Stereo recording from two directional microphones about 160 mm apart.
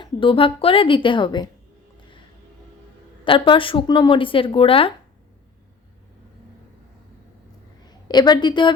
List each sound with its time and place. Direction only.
0.0 s a woman's voice: 35° left (ahead or behind)
3.2 s a woman's voice: 30° left (ahead or behind)
7.9 s a woman's voice: 25° left (ahead or behind)